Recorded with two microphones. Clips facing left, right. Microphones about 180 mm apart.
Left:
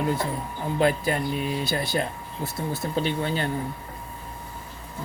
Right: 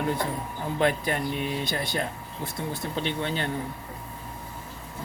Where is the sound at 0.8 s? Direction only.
35° left (ahead or behind).